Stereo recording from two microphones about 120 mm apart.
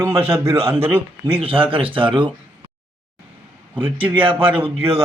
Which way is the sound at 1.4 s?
45° right (ahead or behind).